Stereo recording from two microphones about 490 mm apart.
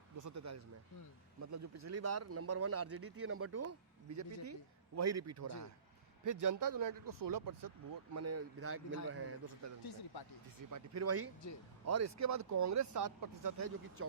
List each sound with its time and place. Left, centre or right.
0.2 s a man's voice: right
8.1 s a man's voice: right